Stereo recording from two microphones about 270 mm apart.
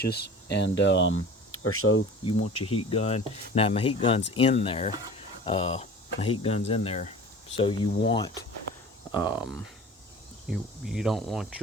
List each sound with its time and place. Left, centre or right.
0.0 s speech: left
2.2 s speech: left
9.1 s speech: centre